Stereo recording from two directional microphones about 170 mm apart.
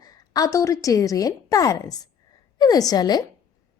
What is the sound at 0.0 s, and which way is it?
A woman's voice, 20° left (ahead or behind).